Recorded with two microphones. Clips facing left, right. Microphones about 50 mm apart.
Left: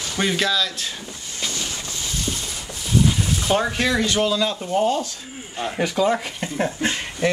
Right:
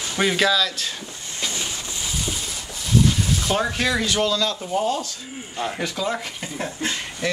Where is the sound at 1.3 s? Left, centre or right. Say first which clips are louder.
Even; centre.